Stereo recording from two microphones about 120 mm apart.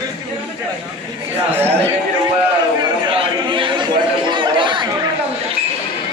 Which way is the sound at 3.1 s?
45° right (ahead or behind).